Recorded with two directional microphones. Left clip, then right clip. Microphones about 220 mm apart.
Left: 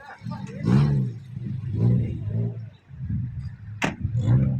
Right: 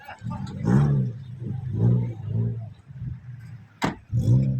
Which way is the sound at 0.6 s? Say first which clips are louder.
Even; 45° left (ahead or behind).